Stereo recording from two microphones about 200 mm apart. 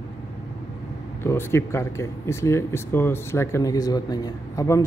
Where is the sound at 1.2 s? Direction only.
15° left (ahead or behind).